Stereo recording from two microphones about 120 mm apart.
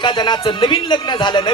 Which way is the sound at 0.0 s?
40° left (ahead or behind).